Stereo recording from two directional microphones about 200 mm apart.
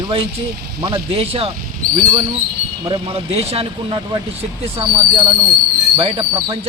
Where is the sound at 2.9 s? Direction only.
25° right (ahead or behind).